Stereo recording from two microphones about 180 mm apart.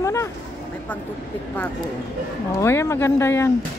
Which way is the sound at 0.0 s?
15° left (ahead or behind).